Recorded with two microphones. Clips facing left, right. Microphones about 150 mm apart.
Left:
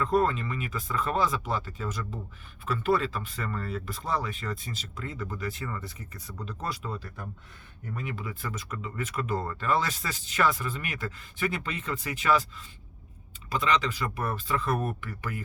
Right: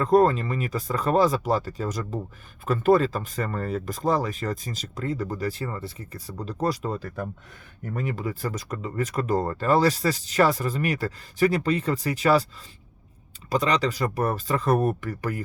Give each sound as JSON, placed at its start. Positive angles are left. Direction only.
{"t": 0.0, "sound": "speech", "side_deg": -40}